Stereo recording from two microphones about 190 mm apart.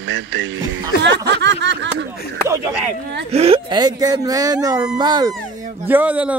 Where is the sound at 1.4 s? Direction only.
70° right (ahead or behind).